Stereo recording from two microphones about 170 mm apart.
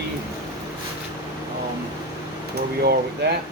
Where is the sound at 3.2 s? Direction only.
80° right.